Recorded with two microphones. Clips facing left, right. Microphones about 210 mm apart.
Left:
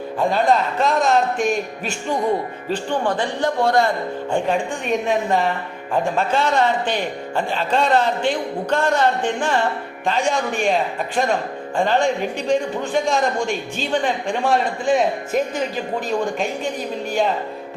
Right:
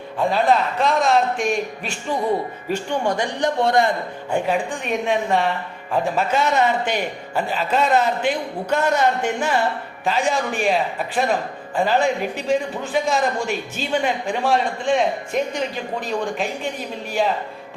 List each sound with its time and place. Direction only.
0.2 s a man's voice: centre (ahead or behind)
2.6 s a man's voice: 15° right (ahead or behind)
4.3 s a man's voice: 5° right (ahead or behind)